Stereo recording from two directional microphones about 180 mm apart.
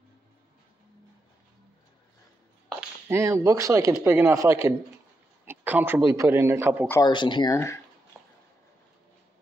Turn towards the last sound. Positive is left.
turn(degrees=15)  # may be behind; listen again after turning